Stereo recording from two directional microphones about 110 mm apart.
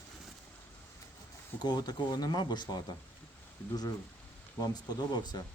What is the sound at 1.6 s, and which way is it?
Speech, 40° left (ahead or behind).